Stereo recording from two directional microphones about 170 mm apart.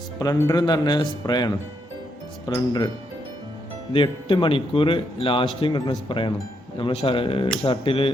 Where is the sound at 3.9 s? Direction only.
30° left (ahead or behind).